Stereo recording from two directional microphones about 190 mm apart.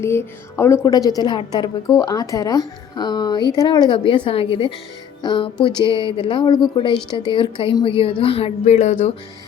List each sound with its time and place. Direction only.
0.0 s a woman's voice: 15° left (ahead or behind); by 9.1 s 35° left (ahead or behind)